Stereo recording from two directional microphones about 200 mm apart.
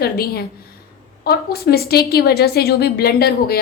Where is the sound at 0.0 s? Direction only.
50° left (ahead or behind).